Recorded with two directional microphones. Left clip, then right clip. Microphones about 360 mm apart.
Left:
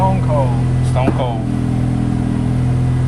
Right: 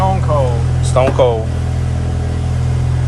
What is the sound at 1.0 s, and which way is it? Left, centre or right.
Speech, centre.